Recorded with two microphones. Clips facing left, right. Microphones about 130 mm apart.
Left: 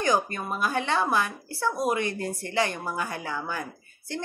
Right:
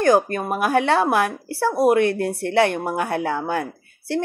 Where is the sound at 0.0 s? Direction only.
60° right (ahead or behind).